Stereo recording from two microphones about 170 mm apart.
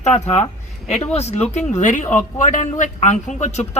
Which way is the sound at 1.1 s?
40° left (ahead or behind).